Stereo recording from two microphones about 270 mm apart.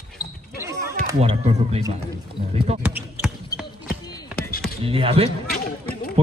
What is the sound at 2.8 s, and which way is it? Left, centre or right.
Speech, centre.